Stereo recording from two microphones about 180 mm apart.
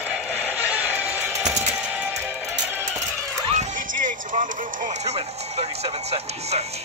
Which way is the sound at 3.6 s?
45° right (ahead or behind).